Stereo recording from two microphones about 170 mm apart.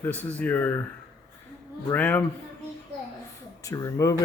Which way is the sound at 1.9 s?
10° left (ahead or behind).